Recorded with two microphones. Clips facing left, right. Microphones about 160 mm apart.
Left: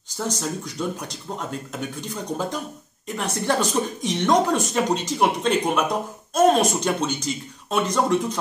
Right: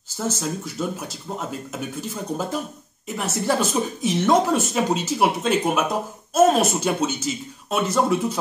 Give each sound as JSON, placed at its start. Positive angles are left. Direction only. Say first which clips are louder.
{"t": 0.2, "sound": "speech", "louder": "right 1 dB", "side_deg": -5}